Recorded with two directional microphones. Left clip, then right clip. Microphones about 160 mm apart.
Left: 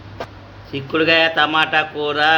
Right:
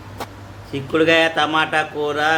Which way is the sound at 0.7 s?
5° right (ahead or behind).